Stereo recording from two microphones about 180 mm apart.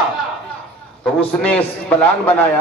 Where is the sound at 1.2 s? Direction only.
5° left (ahead or behind).